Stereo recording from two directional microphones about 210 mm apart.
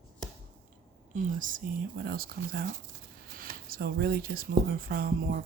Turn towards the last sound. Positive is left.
turn(degrees=-45)  # may be behind; listen again after turning